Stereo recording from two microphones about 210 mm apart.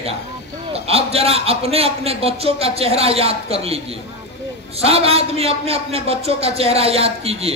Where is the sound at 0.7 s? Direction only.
30° right (ahead or behind).